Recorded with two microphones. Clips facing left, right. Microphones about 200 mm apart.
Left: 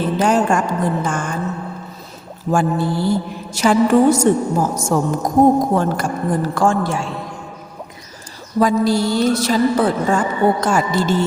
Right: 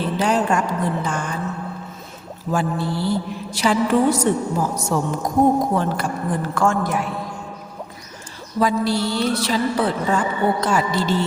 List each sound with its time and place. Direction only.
0.2 s a woman's voice: 45° left (ahead or behind)
2.5 s a woman's voice: 50° left (ahead or behind); by 7.1 s 30° left (ahead or behind)
8.5 s a woman's voice: 45° left (ahead or behind)